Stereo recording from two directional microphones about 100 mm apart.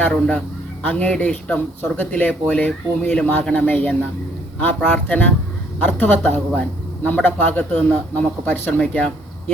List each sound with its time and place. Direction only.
0.0 s a man's voice: 10° left (ahead or behind)